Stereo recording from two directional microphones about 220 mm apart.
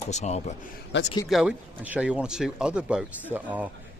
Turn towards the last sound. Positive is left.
turn(degrees=-5)  # may be behind; listen again after turning